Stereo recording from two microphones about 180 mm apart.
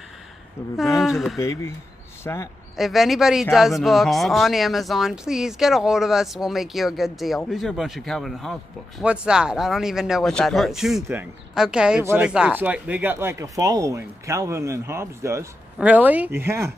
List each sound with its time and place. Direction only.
0.6 s speech: 10° left (ahead or behind)
1.0 s speech: centre (ahead or behind)
1.4 s speech: 20° left (ahead or behind)
2.7 s speech: centre (ahead or behind)